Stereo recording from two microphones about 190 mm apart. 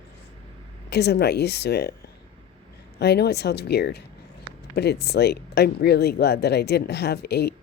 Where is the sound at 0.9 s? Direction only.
60° left (ahead or behind).